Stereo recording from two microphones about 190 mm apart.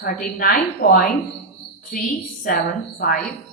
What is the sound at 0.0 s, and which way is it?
Speech, 50° left (ahead or behind).